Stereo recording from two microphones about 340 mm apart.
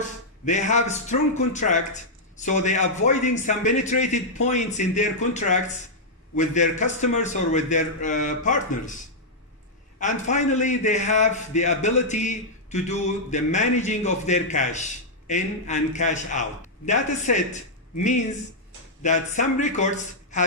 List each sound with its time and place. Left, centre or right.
0.4 s a man's voice: left
10.0 s a man's voice: left